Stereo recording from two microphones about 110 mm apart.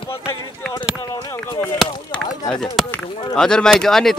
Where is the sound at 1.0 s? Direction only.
35° left (ahead or behind).